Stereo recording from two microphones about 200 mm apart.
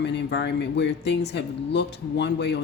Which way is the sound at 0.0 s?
60° left (ahead or behind).